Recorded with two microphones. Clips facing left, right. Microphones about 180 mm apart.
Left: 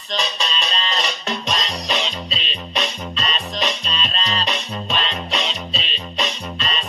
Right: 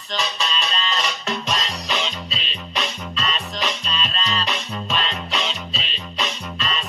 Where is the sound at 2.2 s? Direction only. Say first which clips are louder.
Left 3 dB; 25° left (ahead or behind).